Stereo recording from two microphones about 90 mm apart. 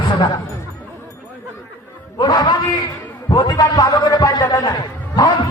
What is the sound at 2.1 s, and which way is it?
A man's voice, 50° left (ahead or behind).